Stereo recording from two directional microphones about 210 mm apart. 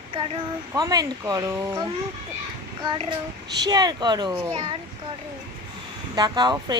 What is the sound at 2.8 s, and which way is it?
Speech, 20° right (ahead or behind).